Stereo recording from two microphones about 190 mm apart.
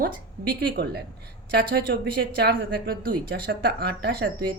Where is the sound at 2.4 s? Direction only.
55° right (ahead or behind).